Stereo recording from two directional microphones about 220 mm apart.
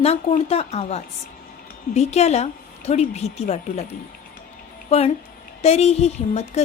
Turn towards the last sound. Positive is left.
turn(degrees=30)  # may be behind; listen again after turning